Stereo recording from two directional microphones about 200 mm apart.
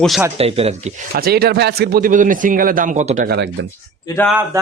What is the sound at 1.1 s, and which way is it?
A man's voice, 50° right (ahead or behind).